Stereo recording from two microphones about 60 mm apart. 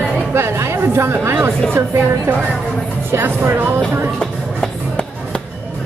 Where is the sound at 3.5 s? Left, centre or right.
Right.